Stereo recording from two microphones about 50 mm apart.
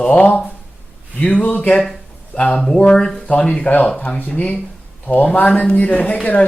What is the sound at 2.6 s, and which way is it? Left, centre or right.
Speech, centre.